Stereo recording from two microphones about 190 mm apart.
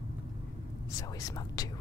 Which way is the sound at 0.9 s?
20° left (ahead or behind).